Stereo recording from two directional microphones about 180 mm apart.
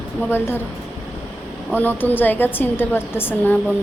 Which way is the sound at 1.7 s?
10° left (ahead or behind).